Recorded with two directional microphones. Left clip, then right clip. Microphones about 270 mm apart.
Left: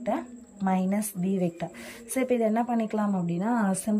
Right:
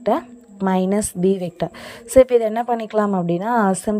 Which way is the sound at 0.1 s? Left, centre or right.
Centre.